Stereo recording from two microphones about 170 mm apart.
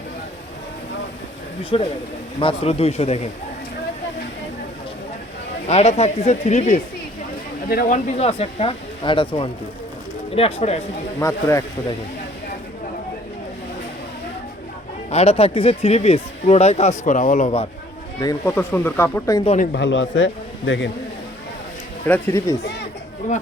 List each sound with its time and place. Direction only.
1.7 s speech: 30° left (ahead or behind)
5.6 s speech: 40° left (ahead or behind)
7.7 s speech: 55° left (ahead or behind); by 10.8 s 40° left (ahead or behind)
11.2 s speech: 15° left (ahead or behind)
15.1 s speech: 35° left (ahead or behind)
18.2 s speech: 20° left (ahead or behind)
18.5 s speech: 10° left (ahead or behind)
19.7 s a man's voice: 90° left
22.0 s speech: 15° left (ahead or behind)
22.6 s speech: 85° left
23.2 s speech: 45° left (ahead or behind)